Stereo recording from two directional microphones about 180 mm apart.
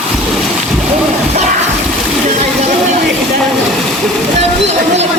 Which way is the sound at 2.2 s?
40° right (ahead or behind).